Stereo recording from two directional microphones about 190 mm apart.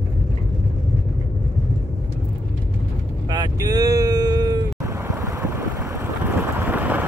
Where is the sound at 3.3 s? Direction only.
20° right (ahead or behind).